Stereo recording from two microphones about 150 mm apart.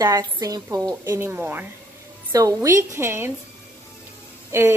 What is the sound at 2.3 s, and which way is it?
Speech, 25° right (ahead or behind).